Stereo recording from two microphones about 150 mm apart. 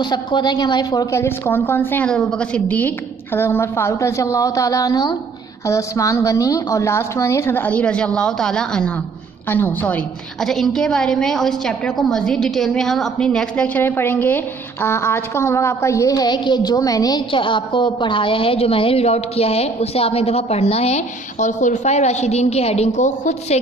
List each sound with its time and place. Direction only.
0.0 s a woman's voice: 30° left (ahead or behind); by 23.6 s 55° left (ahead or behind)